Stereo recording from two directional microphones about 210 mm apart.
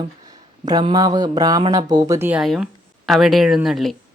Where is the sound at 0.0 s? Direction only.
20° right (ahead or behind); by 3.9 s centre (ahead or behind).